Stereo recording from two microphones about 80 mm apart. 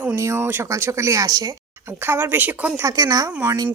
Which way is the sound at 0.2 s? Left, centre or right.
Right.